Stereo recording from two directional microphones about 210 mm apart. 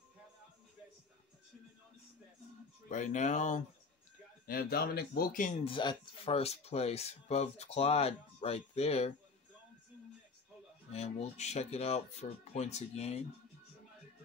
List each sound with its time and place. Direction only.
2.9 s speech: 35° left (ahead or behind)
4.5 s speech: 45° left (ahead or behind); by 9.1 s 30° left (ahead or behind)
10.9 s speech: 30° left (ahead or behind)